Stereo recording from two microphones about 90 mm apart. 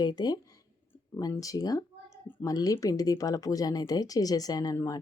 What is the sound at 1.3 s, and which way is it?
Speech, 40° left (ahead or behind).